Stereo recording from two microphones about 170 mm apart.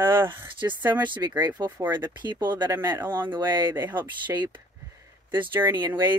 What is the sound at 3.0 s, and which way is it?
Speech, 10° right (ahead or behind).